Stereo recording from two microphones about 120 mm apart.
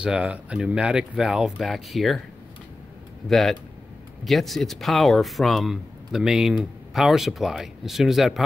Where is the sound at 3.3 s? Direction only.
Centre (ahead or behind).